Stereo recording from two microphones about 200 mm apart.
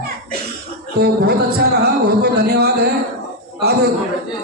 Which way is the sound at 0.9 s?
55° right (ahead or behind).